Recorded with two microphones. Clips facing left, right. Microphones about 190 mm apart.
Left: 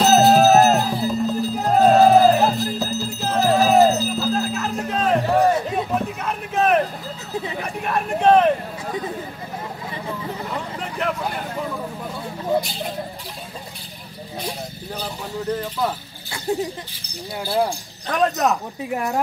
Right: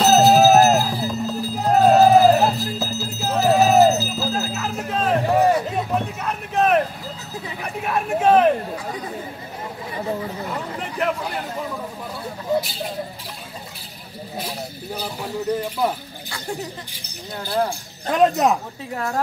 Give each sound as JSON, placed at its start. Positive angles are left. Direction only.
{"t": 0.0, "sound": "run", "side_deg": 0}
{"t": 7.8, "sound": "speech", "side_deg": -5}
{"t": 10.8, "sound": "a sound", "side_deg": 0}
{"t": 15.5, "sound": "speech", "side_deg": -10}
{"t": 16.5, "sound": "speech", "side_deg": 20}
{"t": 18.1, "sound": "speech", "side_deg": -20}
{"t": 18.9, "sound": "speech", "side_deg": 15}